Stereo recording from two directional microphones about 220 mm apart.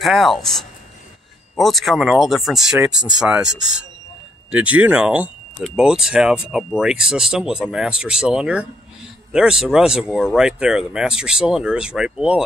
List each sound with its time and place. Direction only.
0.0 s speech: centre (ahead or behind)